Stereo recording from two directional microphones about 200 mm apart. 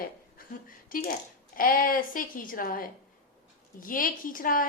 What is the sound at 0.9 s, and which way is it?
A woman's voice, 45° left (ahead or behind).